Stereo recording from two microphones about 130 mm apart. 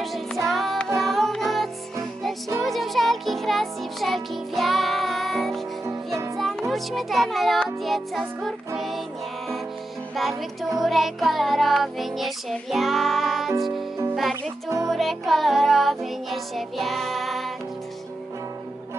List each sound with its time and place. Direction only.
0.0 s music: centre (ahead or behind)
6.7 s music: centre (ahead or behind)
10.1 s music: centre (ahead or behind)
14.3 s music: 25° right (ahead or behind)
14.9 s music: centre (ahead or behind)